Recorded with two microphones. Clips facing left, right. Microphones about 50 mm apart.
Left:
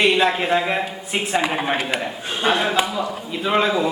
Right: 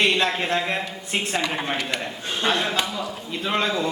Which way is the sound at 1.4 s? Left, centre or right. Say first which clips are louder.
Left 4 dB; left.